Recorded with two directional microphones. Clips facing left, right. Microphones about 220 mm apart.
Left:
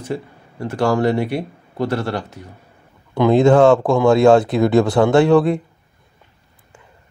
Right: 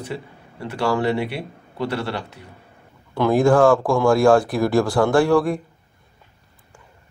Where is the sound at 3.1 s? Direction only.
20° left (ahead or behind).